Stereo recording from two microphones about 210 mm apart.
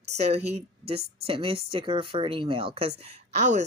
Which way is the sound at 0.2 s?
30° right (ahead or behind).